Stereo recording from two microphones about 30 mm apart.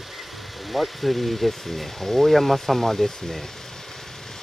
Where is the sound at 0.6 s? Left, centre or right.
Centre.